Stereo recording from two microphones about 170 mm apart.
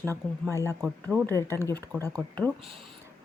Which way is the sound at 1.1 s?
5° right (ahead or behind).